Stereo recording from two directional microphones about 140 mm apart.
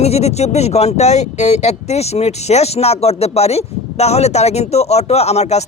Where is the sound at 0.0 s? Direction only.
50° left (ahead or behind).